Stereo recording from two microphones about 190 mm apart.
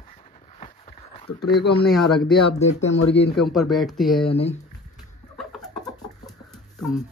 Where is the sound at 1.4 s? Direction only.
60° left (ahead or behind).